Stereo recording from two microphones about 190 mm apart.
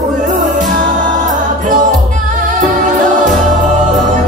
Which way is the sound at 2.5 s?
40° right (ahead or behind).